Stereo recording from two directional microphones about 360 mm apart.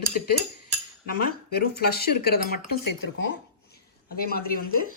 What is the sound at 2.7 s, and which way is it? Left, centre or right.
Speech, left.